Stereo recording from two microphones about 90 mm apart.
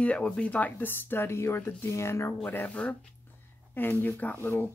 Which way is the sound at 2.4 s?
15° left (ahead or behind).